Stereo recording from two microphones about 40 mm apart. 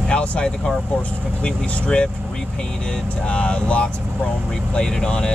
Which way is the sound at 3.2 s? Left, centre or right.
Left.